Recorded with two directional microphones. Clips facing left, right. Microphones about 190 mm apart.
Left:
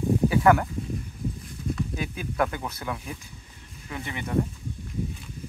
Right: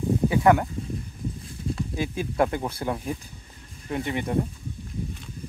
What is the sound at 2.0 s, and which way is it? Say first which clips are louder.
Speech: right 6 dB; 30° right (ahead or behind).